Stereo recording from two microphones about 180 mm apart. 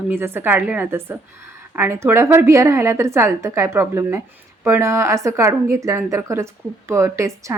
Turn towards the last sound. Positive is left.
turn(degrees=-15)  # may be behind; listen again after turning